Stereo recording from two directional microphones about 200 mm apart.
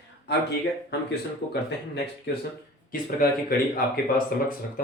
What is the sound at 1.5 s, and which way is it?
Speech, 55° left (ahead or behind).